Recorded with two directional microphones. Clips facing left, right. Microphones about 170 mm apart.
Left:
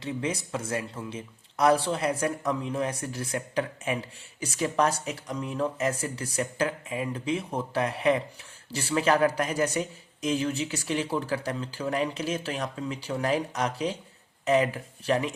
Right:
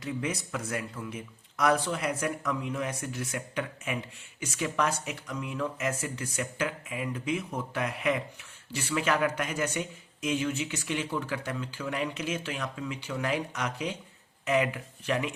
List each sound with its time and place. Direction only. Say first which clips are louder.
0.0 s speech: left 2 dB; 30° left (ahead or behind)